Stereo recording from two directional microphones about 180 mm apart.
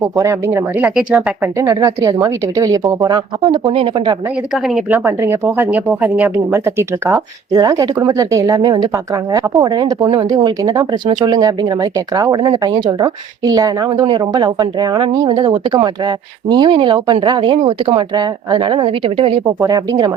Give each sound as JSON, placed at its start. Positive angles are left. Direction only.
{"t": 0.0, "sound": "speech", "side_deg": -15}
{"t": 4.5, "sound": "a woman's voice", "side_deg": 0}
{"t": 19.5, "sound": "speech", "side_deg": -20}